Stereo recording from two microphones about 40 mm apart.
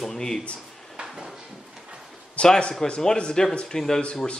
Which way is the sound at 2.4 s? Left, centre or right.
Left.